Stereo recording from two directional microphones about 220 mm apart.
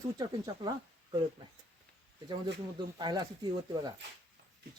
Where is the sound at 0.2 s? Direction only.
20° right (ahead or behind).